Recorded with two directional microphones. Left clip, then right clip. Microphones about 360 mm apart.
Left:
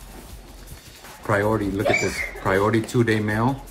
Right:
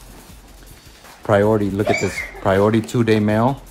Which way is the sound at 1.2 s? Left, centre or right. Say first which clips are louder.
Right 6 dB; right.